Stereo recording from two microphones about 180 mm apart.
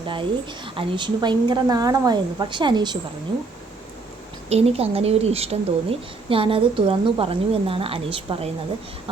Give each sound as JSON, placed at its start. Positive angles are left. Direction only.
{"t": 0.1, "sound": "a woman's voice", "side_deg": -25}
{"t": 4.4, "sound": "speech", "side_deg": -35}